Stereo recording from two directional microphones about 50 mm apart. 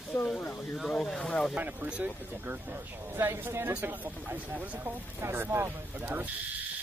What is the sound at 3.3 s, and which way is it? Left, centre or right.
Speech, right.